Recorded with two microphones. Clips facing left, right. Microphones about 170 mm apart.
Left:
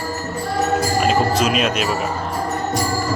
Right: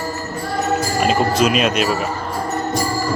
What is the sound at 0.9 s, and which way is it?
Music, centre (ahead or behind).